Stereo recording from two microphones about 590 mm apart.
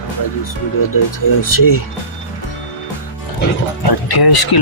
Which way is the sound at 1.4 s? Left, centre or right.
Left.